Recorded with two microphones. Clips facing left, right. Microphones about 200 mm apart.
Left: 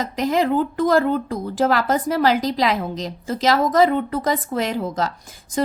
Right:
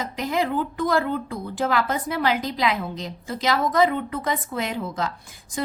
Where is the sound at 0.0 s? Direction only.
45° left (ahead or behind).